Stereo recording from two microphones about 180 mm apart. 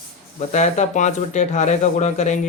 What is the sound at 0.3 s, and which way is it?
Speech, 40° left (ahead or behind).